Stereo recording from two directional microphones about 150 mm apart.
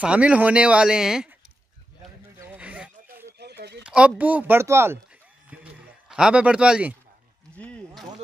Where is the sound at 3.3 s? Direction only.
90° right.